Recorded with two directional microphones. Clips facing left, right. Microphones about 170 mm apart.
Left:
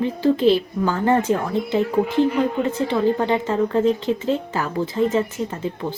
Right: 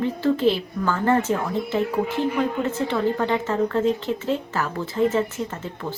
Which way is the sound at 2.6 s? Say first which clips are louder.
Left 3 dB; 15° left (ahead or behind).